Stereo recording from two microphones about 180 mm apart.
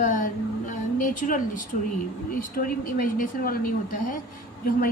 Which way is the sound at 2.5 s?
50° left (ahead or behind).